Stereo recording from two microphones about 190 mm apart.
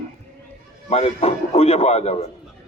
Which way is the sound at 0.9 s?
35° left (ahead or behind).